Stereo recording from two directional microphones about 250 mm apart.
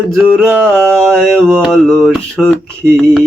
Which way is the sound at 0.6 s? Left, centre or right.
Centre.